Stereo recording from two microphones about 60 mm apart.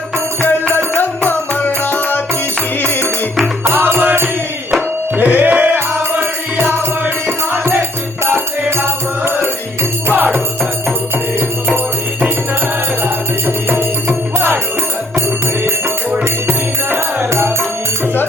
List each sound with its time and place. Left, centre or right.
0.4 s music: left
3.6 s music: right
10.1 s music: right
13.7 s music: right
16.5 s music: right